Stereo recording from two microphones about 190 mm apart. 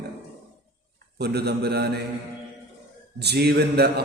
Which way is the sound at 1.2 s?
60° right (ahead or behind).